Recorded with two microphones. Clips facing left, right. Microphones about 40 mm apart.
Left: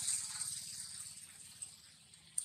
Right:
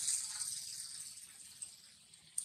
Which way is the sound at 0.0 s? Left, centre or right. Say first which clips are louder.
Even; left.